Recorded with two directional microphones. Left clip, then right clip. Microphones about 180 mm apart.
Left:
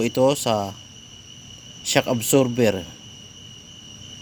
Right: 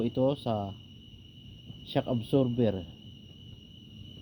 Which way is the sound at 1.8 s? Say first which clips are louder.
Left 11 dB; 40° left (ahead or behind).